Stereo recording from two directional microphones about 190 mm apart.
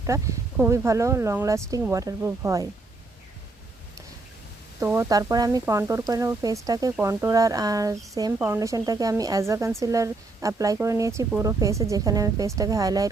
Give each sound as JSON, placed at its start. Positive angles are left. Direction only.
{"t": 0.0, "sound": "speech", "side_deg": -15}
{"t": 4.8, "sound": "speech", "side_deg": -15}